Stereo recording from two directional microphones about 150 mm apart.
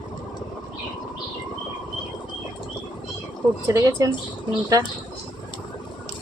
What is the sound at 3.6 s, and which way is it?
Speech, 20° right (ahead or behind).